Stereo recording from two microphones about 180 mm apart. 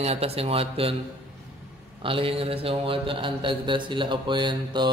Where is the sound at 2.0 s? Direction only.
30° right (ahead or behind).